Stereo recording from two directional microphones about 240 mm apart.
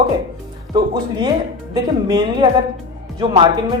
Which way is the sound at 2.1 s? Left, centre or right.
Centre.